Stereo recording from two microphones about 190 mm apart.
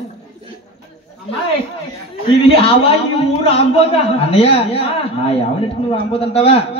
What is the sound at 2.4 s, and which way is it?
A man's voice, 30° left (ahead or behind).